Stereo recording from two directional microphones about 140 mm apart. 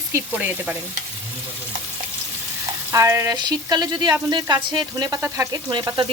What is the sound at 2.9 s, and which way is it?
Speech, 20° right (ahead or behind).